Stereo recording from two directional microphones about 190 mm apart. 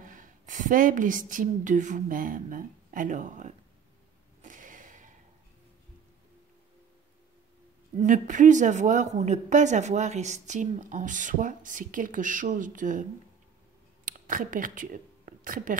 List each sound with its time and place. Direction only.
0.0 s a woman's voice: 45° right (ahead or behind)
4.4 s a sound: 45° right (ahead or behind)
8.0 s a woman's voice: 40° right (ahead or behind)
14.0 s speech: 45° right (ahead or behind)